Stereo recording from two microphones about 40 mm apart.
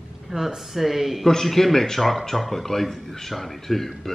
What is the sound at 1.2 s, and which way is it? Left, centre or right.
Speech, centre.